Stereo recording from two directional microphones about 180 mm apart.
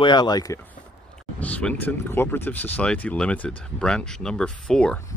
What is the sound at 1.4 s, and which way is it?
Speech, 5° left (ahead or behind).